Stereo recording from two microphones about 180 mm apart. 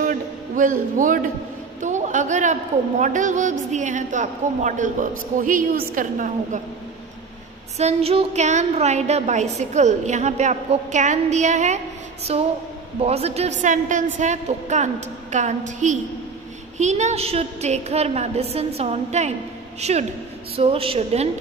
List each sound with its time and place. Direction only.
0.0 s a sound: 50° right (ahead or behind)
1.8 s a man's voice: 45° right (ahead or behind)
7.7 s a woman's voice: 35° right (ahead or behind)